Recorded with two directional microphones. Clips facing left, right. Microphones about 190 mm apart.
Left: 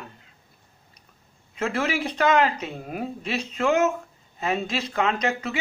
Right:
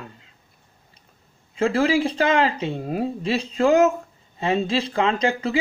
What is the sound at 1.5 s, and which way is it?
Speech, 30° right (ahead or behind).